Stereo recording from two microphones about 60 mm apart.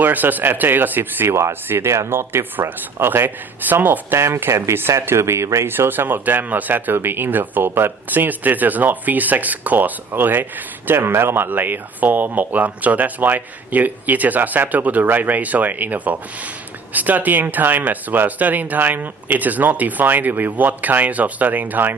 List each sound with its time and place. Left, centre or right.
0.0 s speech: right
4.4 s speech: right
5.6 s speech: right